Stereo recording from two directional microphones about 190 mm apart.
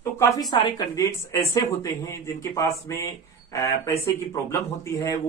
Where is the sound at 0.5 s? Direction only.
20° left (ahead or behind).